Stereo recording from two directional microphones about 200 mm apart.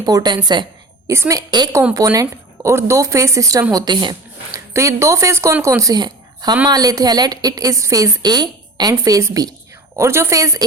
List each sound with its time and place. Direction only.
0.0 s a woman's voice: 20° right (ahead or behind)